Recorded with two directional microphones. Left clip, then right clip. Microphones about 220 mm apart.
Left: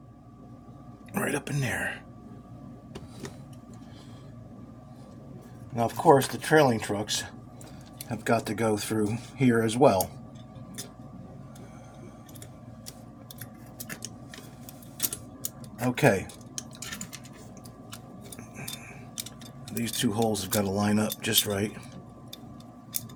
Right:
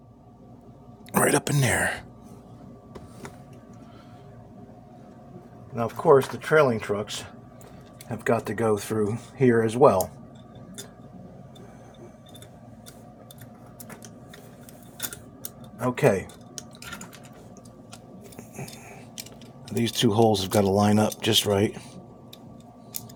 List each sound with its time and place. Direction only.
1.1 s speech: 40° right (ahead or behind)
5.7 s speech: 20° right (ahead or behind)
16.0 s speech: 15° right (ahead or behind)
19.8 s speech: 30° right (ahead or behind)